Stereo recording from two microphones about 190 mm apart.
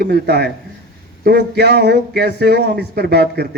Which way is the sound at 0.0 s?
60° right (ahead or behind).